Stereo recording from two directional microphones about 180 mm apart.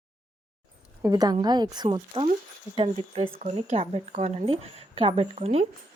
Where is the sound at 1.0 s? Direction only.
20° right (ahead or behind).